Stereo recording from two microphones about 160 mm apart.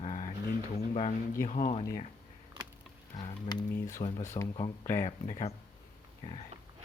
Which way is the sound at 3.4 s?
25° left (ahead or behind).